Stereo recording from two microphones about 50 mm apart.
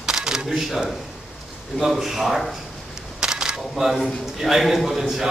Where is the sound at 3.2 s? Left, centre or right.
Centre.